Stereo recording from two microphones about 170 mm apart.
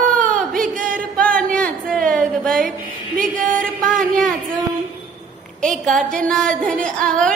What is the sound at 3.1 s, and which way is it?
Music, 50° right (ahead or behind).